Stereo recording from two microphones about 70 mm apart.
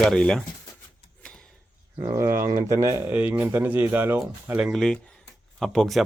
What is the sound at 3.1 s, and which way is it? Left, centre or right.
Speech, right.